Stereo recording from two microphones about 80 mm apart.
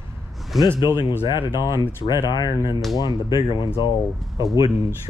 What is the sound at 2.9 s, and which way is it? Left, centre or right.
Speech, left.